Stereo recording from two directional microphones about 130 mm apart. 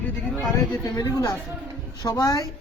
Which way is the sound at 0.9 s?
25° left (ahead or behind).